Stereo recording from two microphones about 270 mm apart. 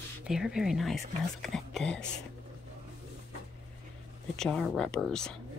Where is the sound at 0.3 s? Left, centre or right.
Centre.